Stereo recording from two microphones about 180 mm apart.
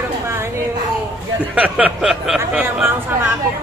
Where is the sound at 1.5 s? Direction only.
5° right (ahead or behind).